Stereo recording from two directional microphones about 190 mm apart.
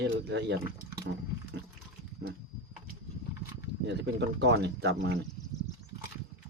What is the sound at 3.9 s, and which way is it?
Speech, 65° right (ahead or behind).